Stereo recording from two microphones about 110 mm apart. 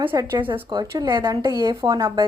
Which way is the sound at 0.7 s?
40° right (ahead or behind).